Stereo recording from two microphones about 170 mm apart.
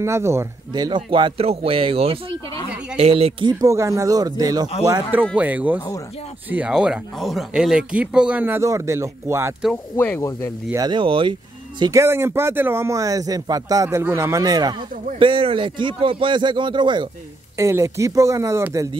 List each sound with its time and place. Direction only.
0.0 s a man's voice: 15° right (ahead or behind); by 3.5 s 35° right (ahead or behind)
3.6 s a man's voice: 20° right (ahead or behind)
5.3 s a man's voice: 10° right (ahead or behind)
9.9 s speech: 10° left (ahead or behind)
10.7 s a man's voice: 25° right (ahead or behind)
11.8 s a man's voice: 15° right (ahead or behind)
17.6 s a man's voice: 15° right (ahead or behind)